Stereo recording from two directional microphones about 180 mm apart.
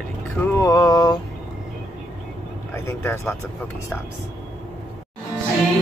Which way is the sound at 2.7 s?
15° left (ahead or behind).